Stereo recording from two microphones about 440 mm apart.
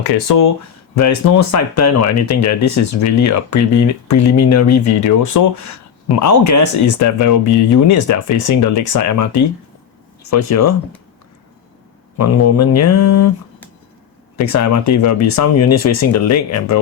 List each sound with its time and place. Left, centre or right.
0.0 s speech: left
12.1 s speech: left
14.3 s speech: left